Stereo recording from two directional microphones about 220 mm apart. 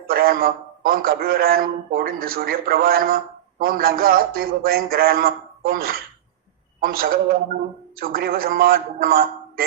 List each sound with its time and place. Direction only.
0.1 s a man's voice: 40° right (ahead or behind)